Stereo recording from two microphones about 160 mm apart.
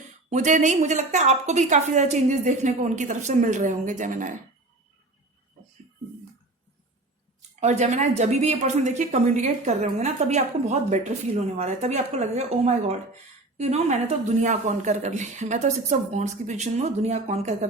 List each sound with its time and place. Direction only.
0.3 s a woman's voice: 50° right (ahead or behind)
7.6 s a woman's voice: 45° right (ahead or behind)